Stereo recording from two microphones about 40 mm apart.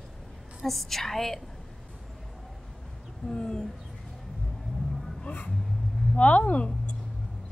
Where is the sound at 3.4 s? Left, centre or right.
Left.